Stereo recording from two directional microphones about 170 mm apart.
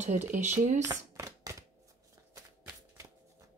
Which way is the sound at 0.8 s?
20° right (ahead or behind).